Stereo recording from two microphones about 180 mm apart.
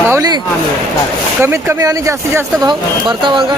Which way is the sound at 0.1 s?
20° right (ahead or behind).